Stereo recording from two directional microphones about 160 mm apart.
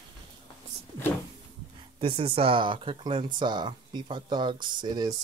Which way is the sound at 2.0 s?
35° right (ahead or behind).